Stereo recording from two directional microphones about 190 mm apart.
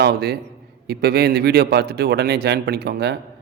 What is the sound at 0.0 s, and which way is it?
Speech, 60° right (ahead or behind).